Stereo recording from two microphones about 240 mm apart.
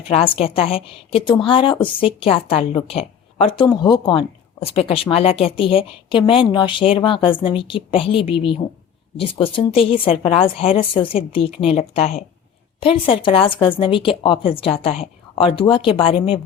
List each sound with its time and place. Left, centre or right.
0.1 s a woman's voice: left